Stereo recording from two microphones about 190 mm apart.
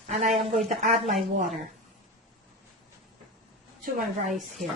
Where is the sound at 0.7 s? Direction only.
40° right (ahead or behind).